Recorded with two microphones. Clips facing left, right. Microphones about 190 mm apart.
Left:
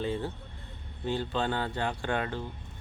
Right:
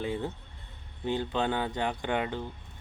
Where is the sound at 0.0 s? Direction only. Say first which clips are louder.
Even; 15° right (ahead or behind).